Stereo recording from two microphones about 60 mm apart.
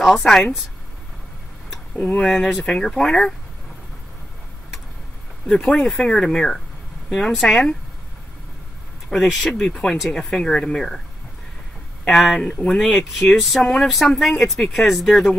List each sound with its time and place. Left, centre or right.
0.2 s speech: centre
2.0 s speech: left
2.2 s speech: centre
5.5 s speech: centre
9.1 s speech: centre
12.0 s speech: centre
13.6 s speech: centre
13.8 s speech: centre